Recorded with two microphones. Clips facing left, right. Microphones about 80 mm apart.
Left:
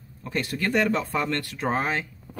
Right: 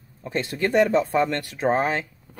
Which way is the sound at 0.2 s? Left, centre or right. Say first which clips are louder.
Right 3 dB; right.